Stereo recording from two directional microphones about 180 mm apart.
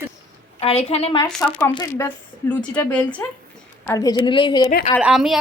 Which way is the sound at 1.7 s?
15° left (ahead or behind).